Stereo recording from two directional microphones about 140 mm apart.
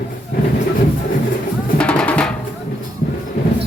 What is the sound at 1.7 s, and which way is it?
Music, 10° left (ahead or behind).